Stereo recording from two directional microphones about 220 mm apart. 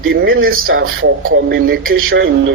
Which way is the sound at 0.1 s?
45° right (ahead or behind).